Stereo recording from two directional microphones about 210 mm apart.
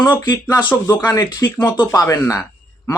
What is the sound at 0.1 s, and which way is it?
Speech, 20° left (ahead or behind).